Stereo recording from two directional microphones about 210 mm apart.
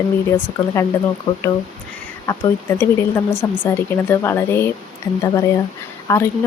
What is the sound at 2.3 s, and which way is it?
Speech, 10° left (ahead or behind).